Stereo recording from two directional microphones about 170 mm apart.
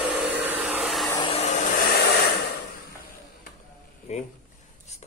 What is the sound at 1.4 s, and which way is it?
Hair dryer, 45° left (ahead or behind).